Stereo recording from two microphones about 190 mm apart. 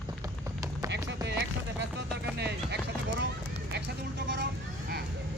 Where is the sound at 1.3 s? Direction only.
65° right (ahead or behind).